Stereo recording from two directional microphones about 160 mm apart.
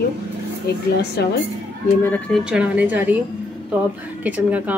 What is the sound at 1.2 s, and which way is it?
Speech, 90° left.